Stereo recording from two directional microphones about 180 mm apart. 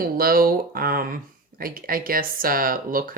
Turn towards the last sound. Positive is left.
turn(degrees=-55)  # may be behind; listen again after turning